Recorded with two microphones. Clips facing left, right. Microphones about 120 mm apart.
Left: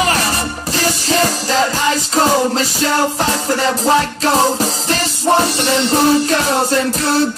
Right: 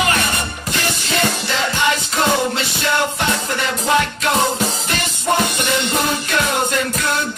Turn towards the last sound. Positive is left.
turn(degrees=35)  # may be behind; listen again after turning